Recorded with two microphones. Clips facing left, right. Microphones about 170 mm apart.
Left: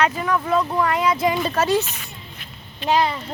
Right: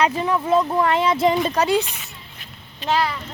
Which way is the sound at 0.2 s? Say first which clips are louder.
Right 2 dB; 25° right (ahead or behind).